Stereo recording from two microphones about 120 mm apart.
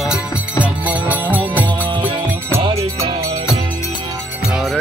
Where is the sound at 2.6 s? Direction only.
55° right (ahead or behind).